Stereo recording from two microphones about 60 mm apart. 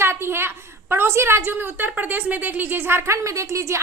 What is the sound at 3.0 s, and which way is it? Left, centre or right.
Speech, right.